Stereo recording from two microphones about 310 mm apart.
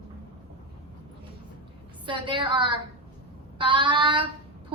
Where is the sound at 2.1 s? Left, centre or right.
Centre.